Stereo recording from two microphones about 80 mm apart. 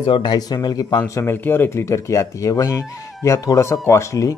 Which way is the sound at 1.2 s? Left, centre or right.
Left.